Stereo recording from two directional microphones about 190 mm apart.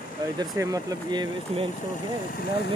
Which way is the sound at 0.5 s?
15° right (ahead or behind).